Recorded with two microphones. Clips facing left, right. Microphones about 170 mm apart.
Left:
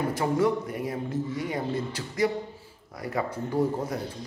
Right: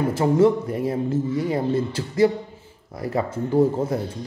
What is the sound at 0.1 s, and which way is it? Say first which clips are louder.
Speech: right 9 dB; 25° right (ahead or behind).